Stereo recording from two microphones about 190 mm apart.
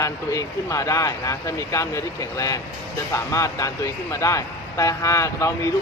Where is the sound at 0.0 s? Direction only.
15° left (ahead or behind).